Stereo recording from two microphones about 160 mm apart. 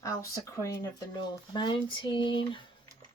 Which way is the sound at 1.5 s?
30° left (ahead or behind).